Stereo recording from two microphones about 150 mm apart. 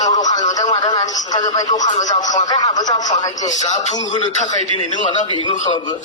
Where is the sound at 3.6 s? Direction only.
50° left (ahead or behind).